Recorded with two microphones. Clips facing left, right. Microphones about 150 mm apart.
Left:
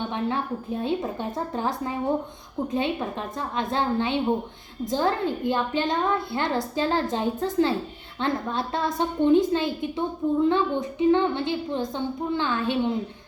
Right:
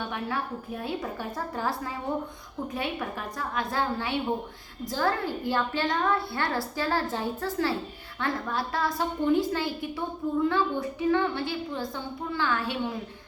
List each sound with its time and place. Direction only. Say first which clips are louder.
0.0 s a woman's voice: left 4 dB; 25° left (ahead or behind)